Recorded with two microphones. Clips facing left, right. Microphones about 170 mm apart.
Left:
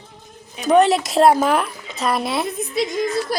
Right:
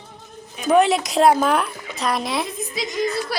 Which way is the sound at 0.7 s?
Centre (ahead or behind).